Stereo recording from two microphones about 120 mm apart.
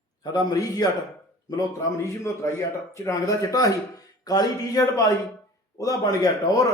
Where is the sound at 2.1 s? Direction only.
25° left (ahead or behind).